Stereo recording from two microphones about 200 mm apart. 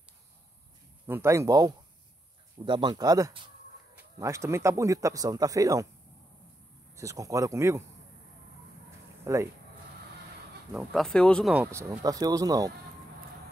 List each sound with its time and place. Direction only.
1.0 s speech: 15° right (ahead or behind)
7.0 s speech: 15° right (ahead or behind)
9.2 s speech: 15° right (ahead or behind)
10.7 s speech: centre (ahead or behind)
11.5 s speech: 10° right (ahead or behind)